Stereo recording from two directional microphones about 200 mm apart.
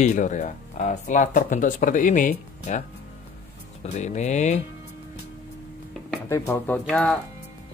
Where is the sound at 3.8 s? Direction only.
35° left (ahead or behind).